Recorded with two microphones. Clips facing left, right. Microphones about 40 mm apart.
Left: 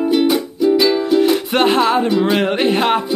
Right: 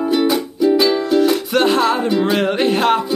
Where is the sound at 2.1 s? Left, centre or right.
Centre.